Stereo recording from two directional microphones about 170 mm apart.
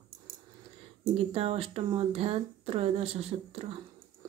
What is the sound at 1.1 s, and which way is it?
Speech, 35° right (ahead or behind).